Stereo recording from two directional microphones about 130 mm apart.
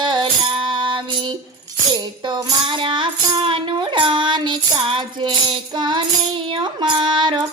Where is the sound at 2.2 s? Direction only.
35° right (ahead or behind).